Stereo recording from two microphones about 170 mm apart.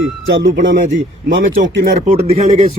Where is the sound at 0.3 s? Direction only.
90° right.